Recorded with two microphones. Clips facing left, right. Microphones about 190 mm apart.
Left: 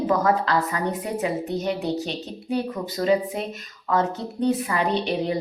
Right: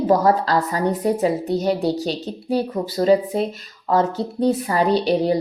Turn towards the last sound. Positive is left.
turn(degrees=-35)  # may be behind; listen again after turning